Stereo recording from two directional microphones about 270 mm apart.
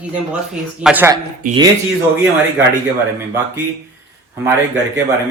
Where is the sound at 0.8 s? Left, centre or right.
Centre.